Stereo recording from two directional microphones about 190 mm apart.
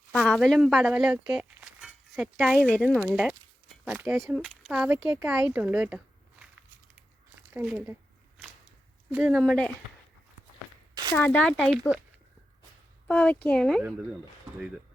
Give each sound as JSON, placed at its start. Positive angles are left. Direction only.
{"t": 0.2, "sound": "speech", "side_deg": 0}
{"t": 7.5, "sound": "speech", "side_deg": -5}
{"t": 9.1, "sound": "speech", "side_deg": -10}
{"t": 9.4, "sound": "speech", "side_deg": 5}
{"t": 11.1, "sound": "speech", "side_deg": 10}
{"t": 13.1, "sound": "speech", "side_deg": 5}